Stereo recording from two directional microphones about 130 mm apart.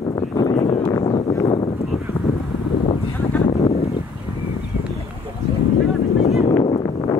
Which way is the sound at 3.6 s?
50° left (ahead or behind).